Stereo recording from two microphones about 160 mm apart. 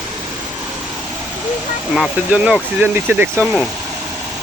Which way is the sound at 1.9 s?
5° right (ahead or behind).